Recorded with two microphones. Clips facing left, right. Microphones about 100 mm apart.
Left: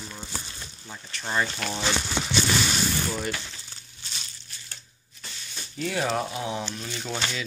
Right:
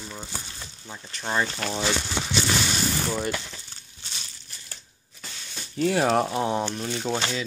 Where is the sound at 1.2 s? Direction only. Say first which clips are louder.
Right 1 dB; 15° right (ahead or behind).